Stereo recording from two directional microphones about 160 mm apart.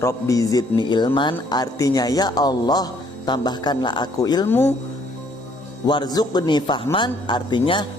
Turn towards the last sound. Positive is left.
turn(degrees=30)  # may be behind; listen again after turning